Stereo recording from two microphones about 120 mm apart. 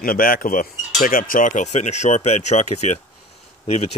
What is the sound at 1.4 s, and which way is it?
Speech, 90° left.